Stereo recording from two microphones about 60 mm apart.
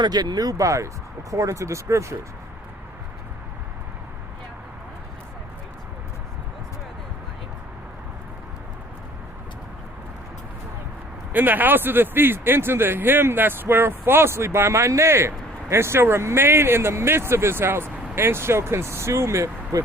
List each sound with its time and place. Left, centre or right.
0.1 s speech: right
11.3 s speech: right